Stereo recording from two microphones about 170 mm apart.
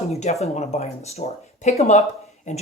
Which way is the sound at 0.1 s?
40° left (ahead or behind).